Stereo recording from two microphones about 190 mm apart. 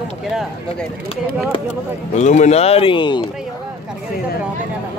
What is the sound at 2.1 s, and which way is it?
Speech, 40° left (ahead or behind).